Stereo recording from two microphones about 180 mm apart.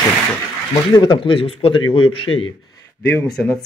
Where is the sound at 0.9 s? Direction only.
25° left (ahead or behind).